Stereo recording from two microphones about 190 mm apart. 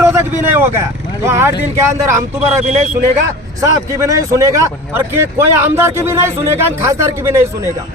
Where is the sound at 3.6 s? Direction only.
15° right (ahead or behind).